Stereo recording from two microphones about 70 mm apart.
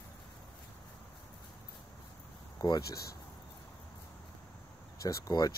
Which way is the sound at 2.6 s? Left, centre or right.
Left.